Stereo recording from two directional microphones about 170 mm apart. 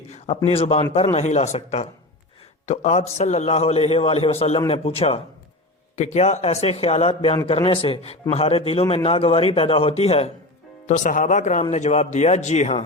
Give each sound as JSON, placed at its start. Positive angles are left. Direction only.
{"t": 0.1, "sound": "a man's voice", "side_deg": 35}